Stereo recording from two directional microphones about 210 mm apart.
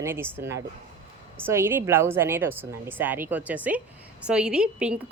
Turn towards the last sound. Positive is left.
turn(degrees=-5)  # may be behind; listen again after turning